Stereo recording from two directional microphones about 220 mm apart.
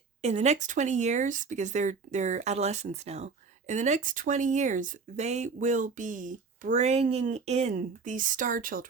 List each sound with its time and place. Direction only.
0.2 s speech: 30° right (ahead or behind)